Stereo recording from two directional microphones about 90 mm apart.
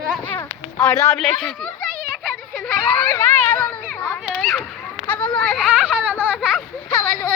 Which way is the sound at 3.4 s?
20° left (ahead or behind).